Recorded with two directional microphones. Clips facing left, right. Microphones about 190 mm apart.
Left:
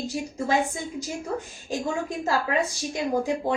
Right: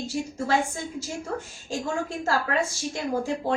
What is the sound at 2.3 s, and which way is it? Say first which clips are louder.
Speech: left 1 dB; 15° left (ahead or behind).